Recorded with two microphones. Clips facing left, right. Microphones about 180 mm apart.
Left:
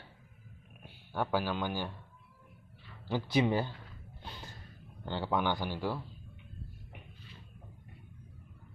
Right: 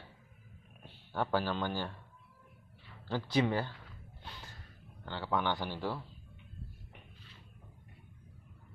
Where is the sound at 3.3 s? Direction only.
15° left (ahead or behind).